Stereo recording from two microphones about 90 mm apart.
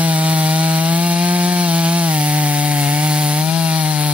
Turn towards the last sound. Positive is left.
turn(degrees=-15)  # may be behind; listen again after turning